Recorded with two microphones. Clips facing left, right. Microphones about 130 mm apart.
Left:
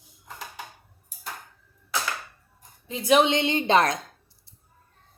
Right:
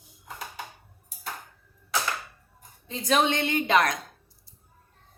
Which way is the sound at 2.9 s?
10° left (ahead or behind).